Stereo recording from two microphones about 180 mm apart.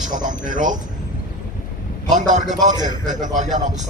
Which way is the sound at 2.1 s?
45° right (ahead or behind).